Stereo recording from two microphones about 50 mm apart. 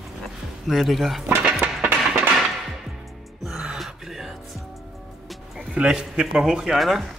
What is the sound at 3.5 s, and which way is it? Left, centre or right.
Gasp, centre.